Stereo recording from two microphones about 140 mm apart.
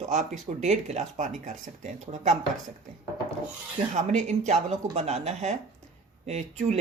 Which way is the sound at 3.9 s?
60° right (ahead or behind).